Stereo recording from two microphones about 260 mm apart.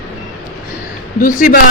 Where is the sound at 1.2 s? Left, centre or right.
Left.